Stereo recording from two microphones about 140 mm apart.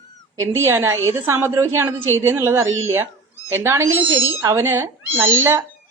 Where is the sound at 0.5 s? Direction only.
15° right (ahead or behind).